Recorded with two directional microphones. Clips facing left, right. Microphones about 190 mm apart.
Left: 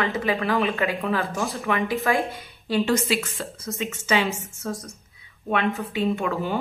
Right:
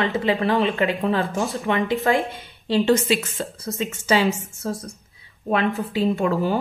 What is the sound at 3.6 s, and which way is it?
A woman's voice, 35° right (ahead or behind).